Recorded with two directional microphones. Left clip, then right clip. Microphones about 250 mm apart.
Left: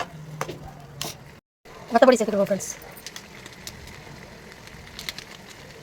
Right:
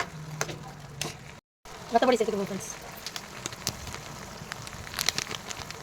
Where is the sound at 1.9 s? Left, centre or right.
Left.